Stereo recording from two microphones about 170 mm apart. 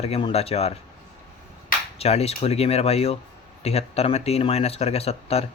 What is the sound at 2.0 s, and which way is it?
Speech, 40° left (ahead or behind).